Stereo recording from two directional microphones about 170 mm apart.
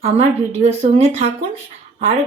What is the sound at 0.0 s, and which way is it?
A woman's voice, 40° right (ahead or behind).